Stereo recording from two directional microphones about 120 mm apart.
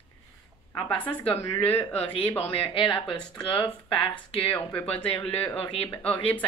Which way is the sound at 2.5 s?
45° left (ahead or behind).